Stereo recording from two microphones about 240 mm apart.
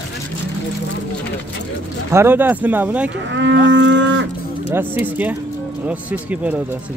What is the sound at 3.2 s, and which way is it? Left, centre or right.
Moo, right.